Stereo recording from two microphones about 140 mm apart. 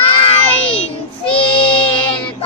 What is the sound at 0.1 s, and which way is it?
Child singing, 45° left (ahead or behind).